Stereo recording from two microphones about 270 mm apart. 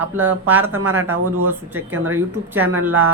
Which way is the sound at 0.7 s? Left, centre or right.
Right.